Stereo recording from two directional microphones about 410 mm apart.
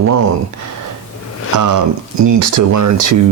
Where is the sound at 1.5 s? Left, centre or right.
Right.